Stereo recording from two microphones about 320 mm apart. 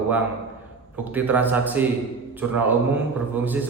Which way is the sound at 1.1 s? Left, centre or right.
Centre.